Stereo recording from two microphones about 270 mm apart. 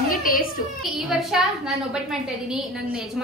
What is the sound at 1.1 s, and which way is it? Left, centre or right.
A woman's voice, centre.